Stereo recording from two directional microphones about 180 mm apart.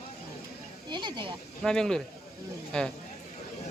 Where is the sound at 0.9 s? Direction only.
25° right (ahead or behind).